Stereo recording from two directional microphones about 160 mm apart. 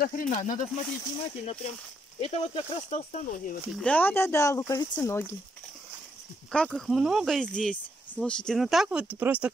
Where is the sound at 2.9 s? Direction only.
50° left (ahead or behind).